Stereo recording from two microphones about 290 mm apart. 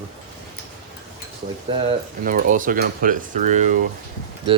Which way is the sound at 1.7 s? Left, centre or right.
Right.